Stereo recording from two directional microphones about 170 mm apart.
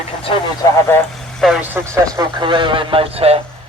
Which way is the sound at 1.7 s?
20° right (ahead or behind).